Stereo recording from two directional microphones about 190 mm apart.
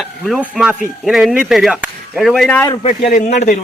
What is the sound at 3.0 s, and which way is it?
Speech, 45° left (ahead or behind).